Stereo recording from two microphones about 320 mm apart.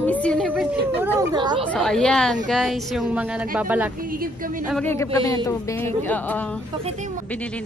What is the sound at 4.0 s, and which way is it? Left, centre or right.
Speech, right.